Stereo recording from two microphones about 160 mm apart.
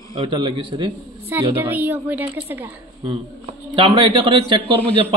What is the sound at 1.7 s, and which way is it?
A woman's voice, 10° right (ahead or behind).